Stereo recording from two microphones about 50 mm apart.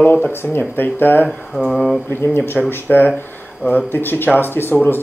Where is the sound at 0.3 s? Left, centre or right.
Left.